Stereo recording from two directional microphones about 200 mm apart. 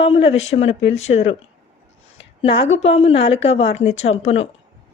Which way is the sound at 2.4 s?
25° left (ahead or behind).